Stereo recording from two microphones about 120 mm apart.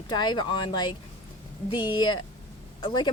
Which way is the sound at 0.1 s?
40° left (ahead or behind).